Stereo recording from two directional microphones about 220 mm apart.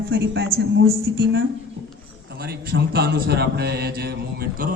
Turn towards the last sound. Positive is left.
turn(degrees=-45)  # may be behind; listen again after turning